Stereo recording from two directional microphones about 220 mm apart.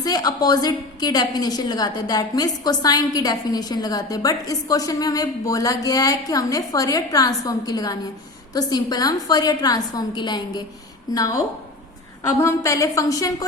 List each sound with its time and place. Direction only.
0.0 s a woman's voice: 15° left (ahead or behind)
12.4 s a woman's voice: 15° left (ahead or behind)